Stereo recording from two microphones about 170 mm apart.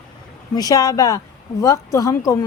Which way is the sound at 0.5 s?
20° left (ahead or behind).